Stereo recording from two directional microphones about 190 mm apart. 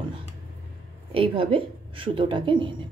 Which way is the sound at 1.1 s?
30° right (ahead or behind).